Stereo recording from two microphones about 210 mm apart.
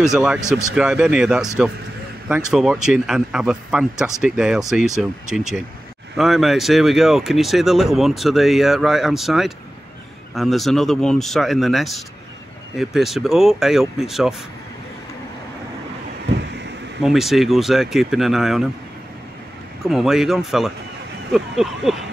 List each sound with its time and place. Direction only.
0.0 s speech: centre (ahead or behind)
17.0 s speech: centre (ahead or behind)
19.8 s speech: centre (ahead or behind)